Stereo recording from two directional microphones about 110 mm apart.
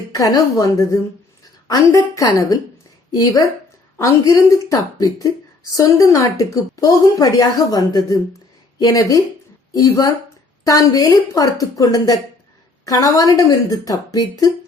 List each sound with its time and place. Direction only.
0.1 s a woman's voice: 30° left (ahead or behind)
3.9 s a woman's voice: 30° left (ahead or behind)